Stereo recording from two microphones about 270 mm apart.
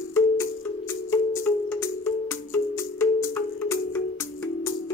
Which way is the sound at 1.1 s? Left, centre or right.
Centre.